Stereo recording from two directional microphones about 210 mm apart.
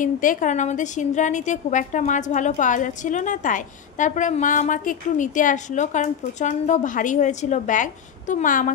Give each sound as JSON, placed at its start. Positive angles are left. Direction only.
{"t": 0.0, "sound": "a woman's voice", "side_deg": 40}